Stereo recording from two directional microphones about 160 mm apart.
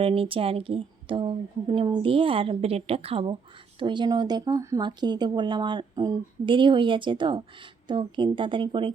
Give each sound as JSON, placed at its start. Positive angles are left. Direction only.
{"t": 0.0, "sound": "a woman's voice", "side_deg": -35}